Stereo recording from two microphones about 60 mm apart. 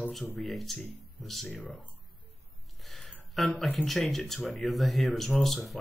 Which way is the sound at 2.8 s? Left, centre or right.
Centre.